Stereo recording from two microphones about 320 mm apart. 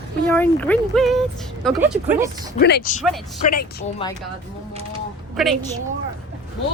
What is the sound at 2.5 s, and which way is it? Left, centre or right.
Speech, left.